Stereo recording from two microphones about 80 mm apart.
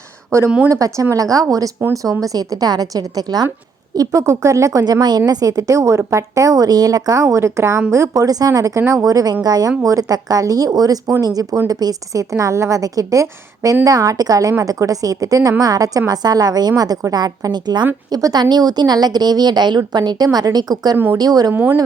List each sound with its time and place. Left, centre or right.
0.3 s a woman's voice: right
3.9 s a woman's voice: right
21.5 s speech: right